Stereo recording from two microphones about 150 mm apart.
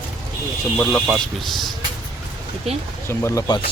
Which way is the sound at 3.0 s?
20° left (ahead or behind).